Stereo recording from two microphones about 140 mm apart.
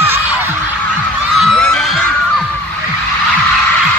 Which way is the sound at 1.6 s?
5° left (ahead or behind).